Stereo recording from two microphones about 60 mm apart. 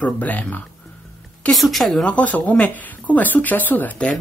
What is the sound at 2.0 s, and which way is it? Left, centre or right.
Speech, left.